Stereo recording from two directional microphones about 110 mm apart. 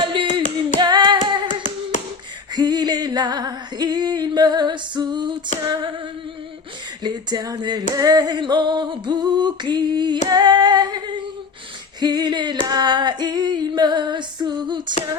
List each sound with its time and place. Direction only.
0.0 s hands: 50° right (ahead or behind)
2.5 s music: 40° right (ahead or behind)
7.0 s a sound: 40° right (ahead or behind)